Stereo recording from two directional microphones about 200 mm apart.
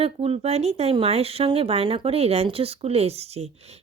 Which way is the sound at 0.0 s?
30° right (ahead or behind).